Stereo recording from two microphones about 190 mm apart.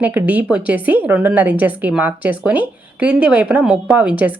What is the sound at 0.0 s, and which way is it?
A woman's voice, 10° right (ahead or behind).